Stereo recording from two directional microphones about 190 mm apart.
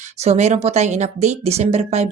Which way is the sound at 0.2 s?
35° right (ahead or behind).